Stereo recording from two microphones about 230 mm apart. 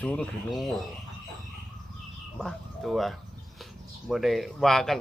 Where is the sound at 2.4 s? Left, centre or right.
Centre.